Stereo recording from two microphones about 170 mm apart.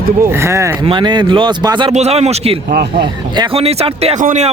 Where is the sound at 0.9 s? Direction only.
25° right (ahead or behind).